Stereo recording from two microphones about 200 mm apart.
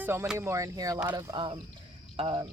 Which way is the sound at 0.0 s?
10° right (ahead or behind).